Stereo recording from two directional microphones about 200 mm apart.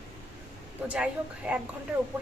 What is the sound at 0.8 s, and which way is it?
Speech, 5° right (ahead or behind).